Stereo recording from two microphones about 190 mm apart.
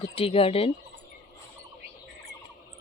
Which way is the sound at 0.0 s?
30° left (ahead or behind).